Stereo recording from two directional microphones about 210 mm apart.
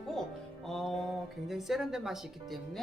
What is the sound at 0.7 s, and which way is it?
Speech, centre (ahead or behind).